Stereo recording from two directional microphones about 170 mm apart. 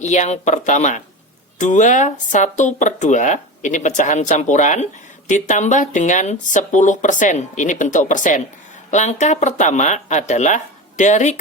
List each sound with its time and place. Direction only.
0.0 s speech: 40° left (ahead or behind)